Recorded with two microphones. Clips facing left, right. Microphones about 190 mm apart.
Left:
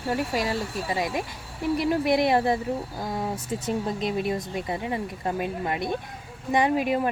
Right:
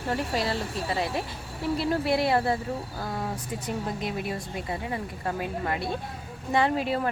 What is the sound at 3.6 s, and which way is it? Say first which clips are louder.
A woman's voice: left 4 dB; 25° left (ahead or behind).